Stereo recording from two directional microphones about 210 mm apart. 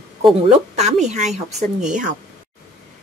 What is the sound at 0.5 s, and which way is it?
Speech, 30° right (ahead or behind).